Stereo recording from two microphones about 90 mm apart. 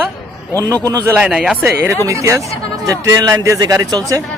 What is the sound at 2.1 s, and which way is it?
Speech, 35° right (ahead or behind).